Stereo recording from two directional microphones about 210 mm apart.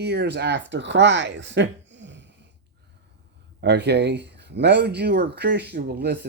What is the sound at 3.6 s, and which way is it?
Speech, 55° right (ahead or behind).